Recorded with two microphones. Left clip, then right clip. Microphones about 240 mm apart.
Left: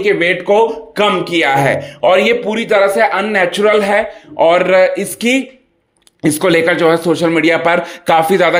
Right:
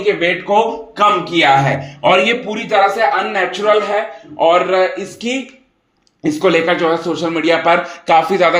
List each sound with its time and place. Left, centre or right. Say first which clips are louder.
0.0 s speech: left 2 dB; left